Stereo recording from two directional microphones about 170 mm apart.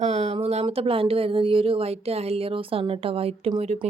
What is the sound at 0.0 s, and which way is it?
Speech, 40° right (ahead or behind).